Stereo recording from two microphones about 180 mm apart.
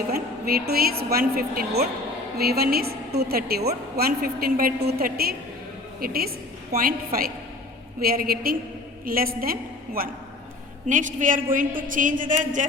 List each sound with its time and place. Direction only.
0.1 s a woman's voice: 55° right (ahead or behind)